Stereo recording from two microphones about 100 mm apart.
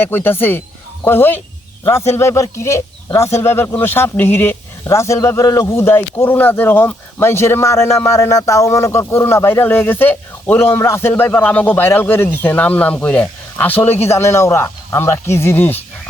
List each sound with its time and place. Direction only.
0.0 s speech: 20° left (ahead or behind)